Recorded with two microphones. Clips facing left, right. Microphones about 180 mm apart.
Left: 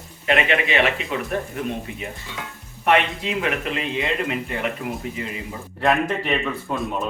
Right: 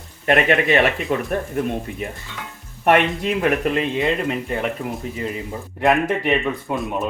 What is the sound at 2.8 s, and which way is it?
Speech, 50° right (ahead or behind).